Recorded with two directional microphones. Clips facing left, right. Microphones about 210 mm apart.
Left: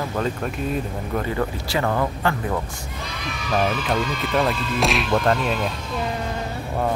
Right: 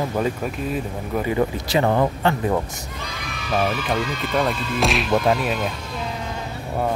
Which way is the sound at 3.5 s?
5° right (ahead or behind).